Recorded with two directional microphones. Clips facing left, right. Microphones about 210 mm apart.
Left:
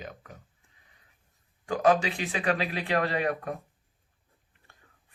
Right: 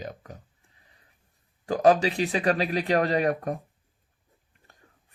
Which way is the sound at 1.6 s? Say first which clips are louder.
Right 3 dB; 35° right (ahead or behind).